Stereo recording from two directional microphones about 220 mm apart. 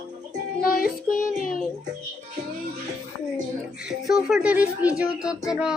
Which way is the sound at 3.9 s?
Centre (ahead or behind).